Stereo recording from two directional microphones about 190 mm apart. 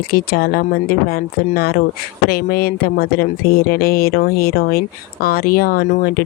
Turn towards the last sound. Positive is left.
turn(degrees=50)  # may be behind; listen again after turning